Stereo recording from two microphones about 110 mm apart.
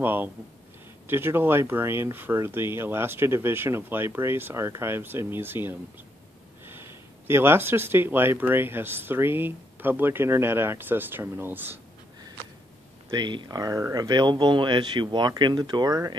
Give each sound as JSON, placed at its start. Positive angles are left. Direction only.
{"t": 0.0, "sound": "speech", "side_deg": -20}
{"t": 7.2, "sound": "speech", "side_deg": -20}
{"t": 13.1, "sound": "speech", "side_deg": -45}